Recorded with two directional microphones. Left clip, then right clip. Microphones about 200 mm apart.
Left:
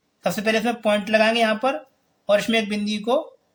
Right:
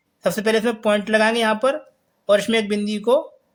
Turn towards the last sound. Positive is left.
turn(degrees=-30)  # may be behind; listen again after turning